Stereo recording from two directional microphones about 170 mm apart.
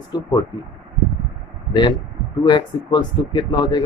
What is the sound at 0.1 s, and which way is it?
Speech, 20° left (ahead or behind).